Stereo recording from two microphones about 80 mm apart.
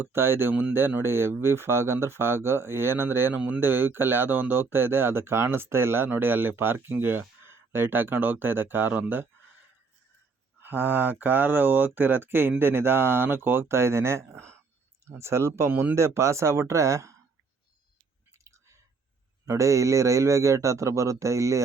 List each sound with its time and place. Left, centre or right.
0.0 s speech: right
10.6 s a man's voice: right
18.4 s a sound: right
19.5 s a man's voice: right